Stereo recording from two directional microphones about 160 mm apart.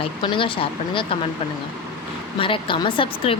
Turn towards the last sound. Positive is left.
turn(degrees=30)  # may be behind; listen again after turning